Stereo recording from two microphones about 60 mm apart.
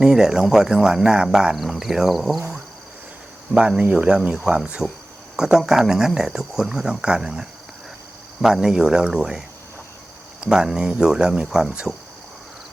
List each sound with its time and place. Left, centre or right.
0.0 s speech: centre
3.8 s speech: centre
10.4 s speech: centre